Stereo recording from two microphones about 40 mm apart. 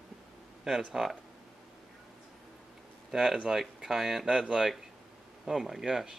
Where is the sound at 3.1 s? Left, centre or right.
Centre.